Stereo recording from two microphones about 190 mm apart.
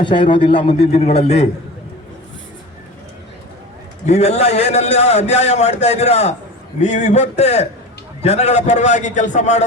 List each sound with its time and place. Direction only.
0.0 s a man's voice: 25° left (ahead or behind)
4.0 s a man's voice: 35° left (ahead or behind)